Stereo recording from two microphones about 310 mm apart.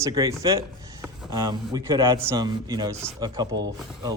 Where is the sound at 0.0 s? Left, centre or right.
Centre.